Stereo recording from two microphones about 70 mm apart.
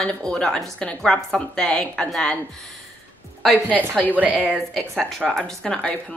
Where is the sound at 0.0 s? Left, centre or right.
Centre.